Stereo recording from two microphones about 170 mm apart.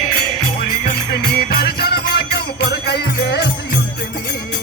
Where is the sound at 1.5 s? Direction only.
65° left (ahead or behind).